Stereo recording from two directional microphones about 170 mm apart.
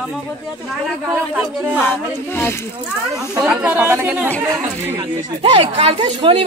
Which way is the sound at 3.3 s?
5° right (ahead or behind).